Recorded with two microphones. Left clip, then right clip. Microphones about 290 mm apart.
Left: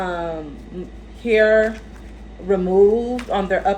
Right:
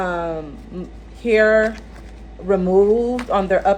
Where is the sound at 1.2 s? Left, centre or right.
Right.